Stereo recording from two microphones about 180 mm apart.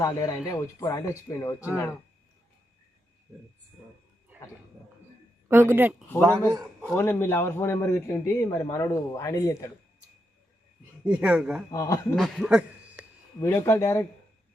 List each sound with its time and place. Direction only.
0.0 s a man's voice: 15° left (ahead or behind)
4.3 s a sound: 10° right (ahead or behind)
5.5 s speech: 10° right (ahead or behind)
6.1 s a man's voice: 10° left (ahead or behind)
11.0 s speech: 5° right (ahead or behind)
11.7 s speech: 20° left (ahead or behind)
12.1 s speech: centre (ahead or behind)
13.4 s a man's voice: 15° left (ahead or behind)